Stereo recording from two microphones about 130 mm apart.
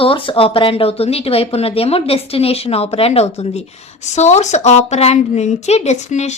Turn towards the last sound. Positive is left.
turn(degrees=60)  # may be behind; listen again after turning